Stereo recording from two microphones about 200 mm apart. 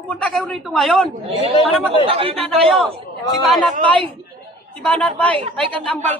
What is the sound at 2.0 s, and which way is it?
Speech, 25° right (ahead or behind).